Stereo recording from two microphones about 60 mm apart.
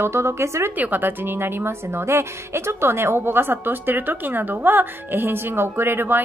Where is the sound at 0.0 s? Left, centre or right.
Right.